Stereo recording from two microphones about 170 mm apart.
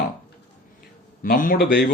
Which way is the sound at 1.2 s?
55° left (ahead or behind).